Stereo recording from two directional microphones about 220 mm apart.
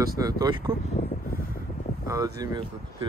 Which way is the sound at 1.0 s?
40° left (ahead or behind).